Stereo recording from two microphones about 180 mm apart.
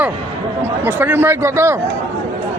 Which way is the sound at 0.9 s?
10° right (ahead or behind).